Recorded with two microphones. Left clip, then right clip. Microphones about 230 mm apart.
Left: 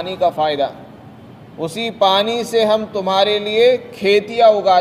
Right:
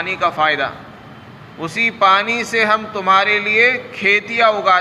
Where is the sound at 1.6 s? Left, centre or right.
Left.